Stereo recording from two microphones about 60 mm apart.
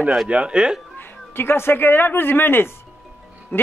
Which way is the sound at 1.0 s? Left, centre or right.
Left.